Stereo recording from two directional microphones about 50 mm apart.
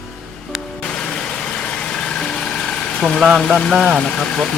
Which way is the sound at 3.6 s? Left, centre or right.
Centre.